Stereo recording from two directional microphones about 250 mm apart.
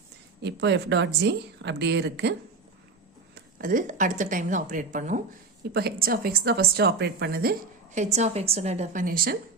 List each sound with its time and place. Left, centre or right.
0.4 s speech: right
3.6 s a woman's voice: right
7.9 s a woman's voice: right